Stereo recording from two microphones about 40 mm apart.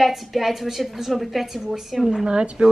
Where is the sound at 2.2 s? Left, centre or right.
Right.